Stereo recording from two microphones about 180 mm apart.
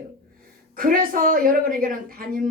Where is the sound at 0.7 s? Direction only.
50° right (ahead or behind).